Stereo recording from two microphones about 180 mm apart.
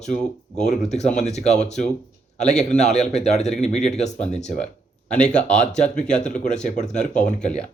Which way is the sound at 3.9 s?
40° left (ahead or behind).